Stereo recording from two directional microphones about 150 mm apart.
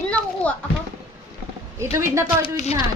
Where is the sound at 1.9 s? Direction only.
20° right (ahead or behind).